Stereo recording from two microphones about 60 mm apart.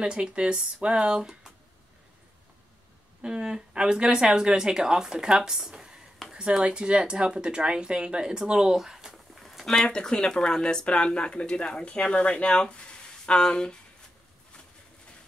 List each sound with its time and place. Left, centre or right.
0.0 s speech: centre
3.2 s speech: centre